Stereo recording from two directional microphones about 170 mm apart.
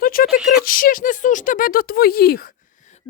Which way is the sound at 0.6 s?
55° left (ahead or behind).